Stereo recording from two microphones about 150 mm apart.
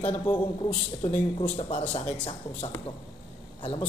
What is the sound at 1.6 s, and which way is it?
Speech, 40° left (ahead or behind).